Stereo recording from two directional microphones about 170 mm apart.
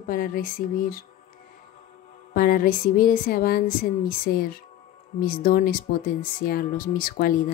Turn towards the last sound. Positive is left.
turn(degrees=55)  # may be behind; listen again after turning